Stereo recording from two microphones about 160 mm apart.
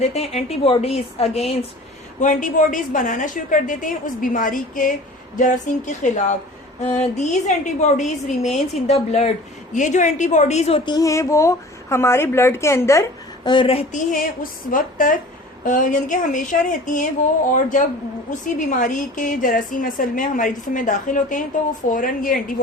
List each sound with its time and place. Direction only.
0.0 s a woman's voice: 40° left (ahead or behind)
2.2 s a woman's voice: 50° left (ahead or behind); by 13.8 s 30° left (ahead or behind)
13.9 s a woman's voice: 60° left (ahead or behind)